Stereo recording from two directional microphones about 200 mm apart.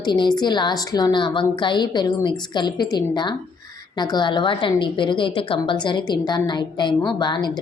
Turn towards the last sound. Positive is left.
turn(degrees=20)  # may be behind; listen again after turning